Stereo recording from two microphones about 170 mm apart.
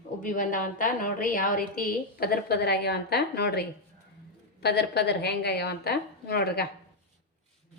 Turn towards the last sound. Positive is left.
turn(degrees=70)  # may be behind; listen again after turning